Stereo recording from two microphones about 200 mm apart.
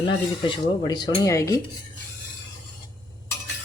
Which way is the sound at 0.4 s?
20° left (ahead or behind).